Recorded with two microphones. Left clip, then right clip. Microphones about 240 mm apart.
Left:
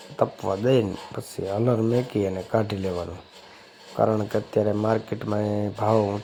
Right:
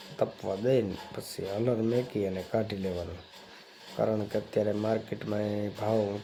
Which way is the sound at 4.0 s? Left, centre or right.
Centre.